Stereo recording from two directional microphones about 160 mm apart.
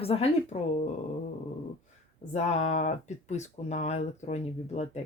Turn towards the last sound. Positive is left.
turn(degrees=45)  # may be behind; listen again after turning